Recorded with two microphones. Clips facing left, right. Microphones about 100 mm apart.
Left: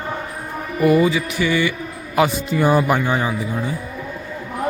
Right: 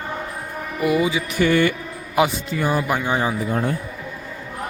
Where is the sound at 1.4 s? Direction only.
50° right (ahead or behind).